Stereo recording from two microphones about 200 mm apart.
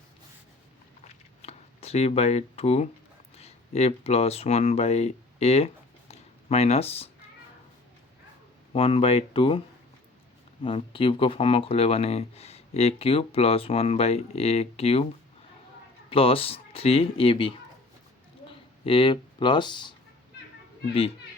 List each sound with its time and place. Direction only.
1.0 s a sound: 30° left (ahead or behind)
3.3 s speech: 30° left (ahead or behind)
8.7 s speech: 30° left (ahead or behind)
16.0 s speech: 25° left (ahead or behind)
18.9 s speech: 25° left (ahead or behind)